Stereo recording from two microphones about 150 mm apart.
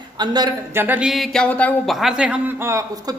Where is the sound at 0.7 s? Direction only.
10° right (ahead or behind).